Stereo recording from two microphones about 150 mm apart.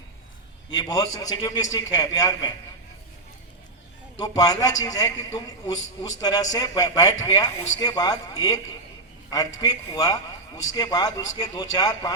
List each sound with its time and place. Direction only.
0.8 s a man's voice: 25° left (ahead or behind)
4.2 s a man's voice: 25° left (ahead or behind)